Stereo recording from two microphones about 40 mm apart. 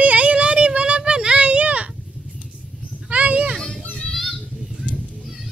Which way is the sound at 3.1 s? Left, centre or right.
Right.